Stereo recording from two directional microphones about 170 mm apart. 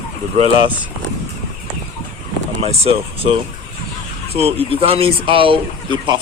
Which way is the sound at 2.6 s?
35° right (ahead or behind).